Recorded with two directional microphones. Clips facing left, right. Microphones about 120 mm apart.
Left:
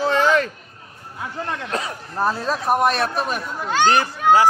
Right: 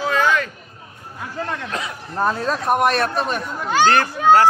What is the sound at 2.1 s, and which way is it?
Speech, 5° left (ahead or behind).